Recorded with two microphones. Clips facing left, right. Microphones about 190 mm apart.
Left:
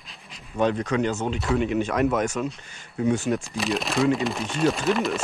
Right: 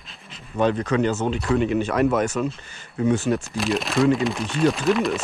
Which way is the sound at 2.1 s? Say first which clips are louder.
Right 3 dB; 10° left (ahead or behind).